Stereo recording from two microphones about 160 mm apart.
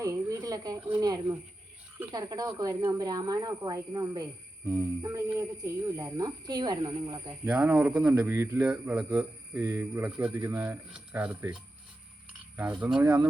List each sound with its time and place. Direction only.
0.0 s speech: 20° right (ahead or behind)
7.4 s speech: 10° right (ahead or behind)
12.5 s speech: 5° right (ahead or behind)